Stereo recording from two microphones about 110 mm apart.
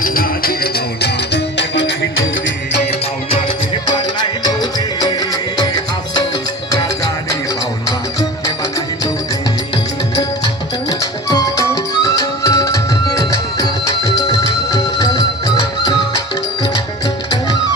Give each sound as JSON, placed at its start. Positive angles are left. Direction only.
{"t": 3.9, "sound": "music", "side_deg": 40}
{"t": 10.8, "sound": "music", "side_deg": 35}